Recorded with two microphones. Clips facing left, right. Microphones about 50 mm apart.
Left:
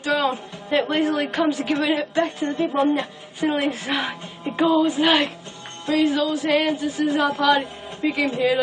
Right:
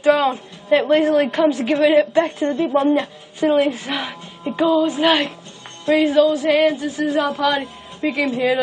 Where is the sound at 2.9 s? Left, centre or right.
Centre.